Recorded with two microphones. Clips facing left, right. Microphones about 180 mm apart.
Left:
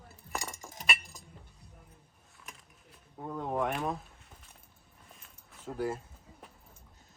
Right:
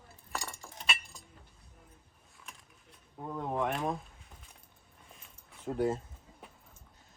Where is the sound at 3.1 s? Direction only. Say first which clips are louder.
Left 1 dB; centre (ahead or behind).